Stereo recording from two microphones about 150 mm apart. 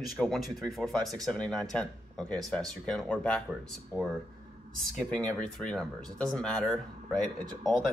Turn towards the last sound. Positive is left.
turn(degrees=5)  # may be behind; listen again after turning